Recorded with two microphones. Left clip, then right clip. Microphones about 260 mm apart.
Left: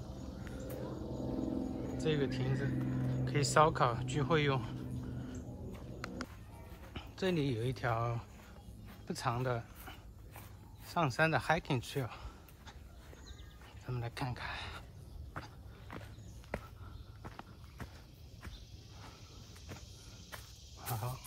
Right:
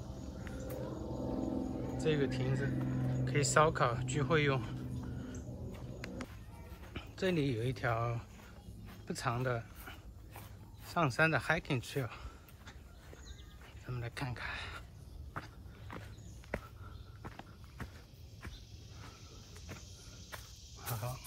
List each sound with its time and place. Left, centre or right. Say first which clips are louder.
0.5 s wild animals: right 1 dB; centre
1.0 s a sound: right 1 dB; centre
2.0 s a sound: right 1 dB; centre
6.8 s speech: right 1 dB; centre
8.8 s dog: even; centre
10.9 s speech: right 1 dB; centre
13.8 s speech: left 1 dB; centre
15.9 s walk: right 1 dB; centre
20.8 s snake: left 1 dB; centre